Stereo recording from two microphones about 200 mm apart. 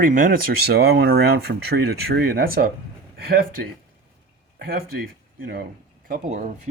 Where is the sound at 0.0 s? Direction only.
45° right (ahead or behind).